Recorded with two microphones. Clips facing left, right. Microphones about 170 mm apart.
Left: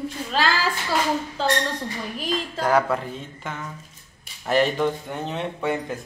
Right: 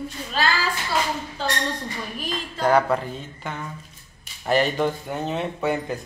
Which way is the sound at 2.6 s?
Centre (ahead or behind).